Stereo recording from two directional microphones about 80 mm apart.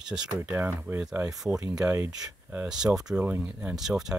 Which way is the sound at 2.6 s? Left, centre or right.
Centre.